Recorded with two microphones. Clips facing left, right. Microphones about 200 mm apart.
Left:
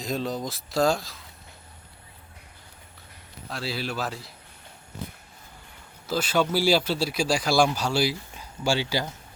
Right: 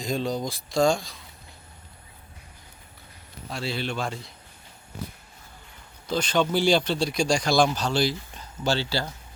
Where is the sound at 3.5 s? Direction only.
Centre (ahead or behind).